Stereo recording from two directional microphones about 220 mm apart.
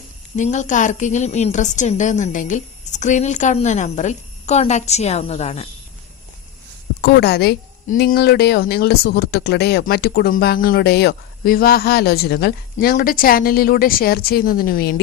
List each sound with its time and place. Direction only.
0.3 s a woman's voice: 30° left (ahead or behind)
7.0 s a woman's voice: 50° left (ahead or behind)